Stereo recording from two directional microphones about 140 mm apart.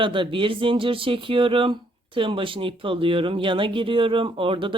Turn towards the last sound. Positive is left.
turn(degrees=-40)  # may be behind; listen again after turning